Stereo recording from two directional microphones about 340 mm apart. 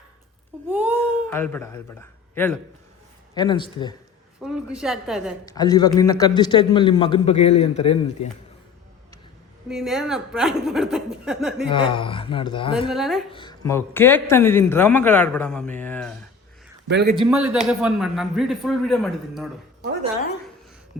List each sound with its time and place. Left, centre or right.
0.7 s baby cry: centre
1.3 s a man's voice: centre
4.4 s a man's voice: centre
5.5 s a man's voice: centre
9.6 s a man's voice: centre
11.7 s a man's voice: centre
12.9 s a man's voice: centre
13.3 s a man's voice: centre
16.9 s a man's voice: right
17.2 s a man's voice: centre